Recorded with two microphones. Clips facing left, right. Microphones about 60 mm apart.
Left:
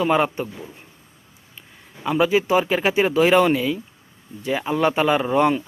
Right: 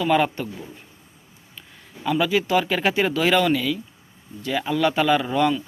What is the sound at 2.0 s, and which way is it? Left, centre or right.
Speech, left.